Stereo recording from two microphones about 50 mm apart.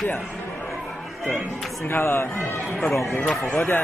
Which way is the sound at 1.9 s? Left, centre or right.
Left.